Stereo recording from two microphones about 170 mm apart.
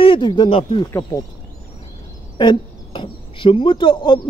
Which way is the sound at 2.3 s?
25° left (ahead or behind).